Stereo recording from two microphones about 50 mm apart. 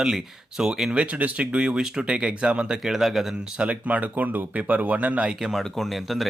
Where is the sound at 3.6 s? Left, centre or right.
Right.